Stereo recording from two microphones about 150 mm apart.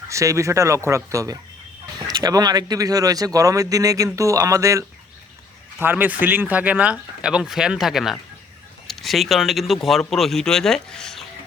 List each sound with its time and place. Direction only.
0.1 s speech: 20° right (ahead or behind); by 11.2 s 5° left (ahead or behind)